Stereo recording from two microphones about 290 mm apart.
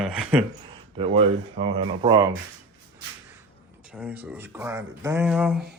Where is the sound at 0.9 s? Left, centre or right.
Centre.